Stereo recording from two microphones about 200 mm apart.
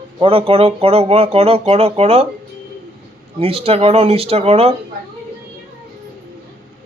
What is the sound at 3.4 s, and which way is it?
Speech, 30° right (ahead or behind).